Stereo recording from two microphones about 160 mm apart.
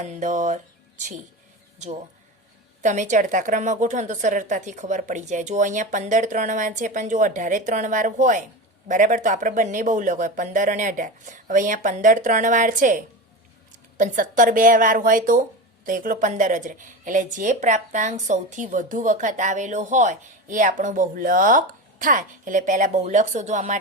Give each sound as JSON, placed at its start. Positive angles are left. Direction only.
{"t": 0.0, "sound": "speech", "side_deg": -50}
{"t": 2.8, "sound": "speech", "side_deg": -50}
{"t": 14.0, "sound": "a woman's voice", "side_deg": -55}